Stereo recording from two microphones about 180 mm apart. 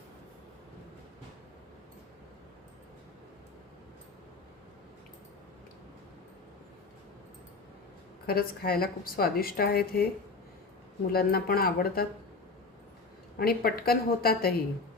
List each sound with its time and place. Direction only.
8.3 s a woman's voice: 55° left (ahead or behind)
11.1 s a woman's voice: 55° left (ahead or behind)
13.4 s a woman's voice: 55° left (ahead or behind)